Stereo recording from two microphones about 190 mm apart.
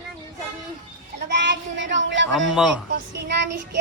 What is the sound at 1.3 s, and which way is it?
Speech, 70° right (ahead or behind).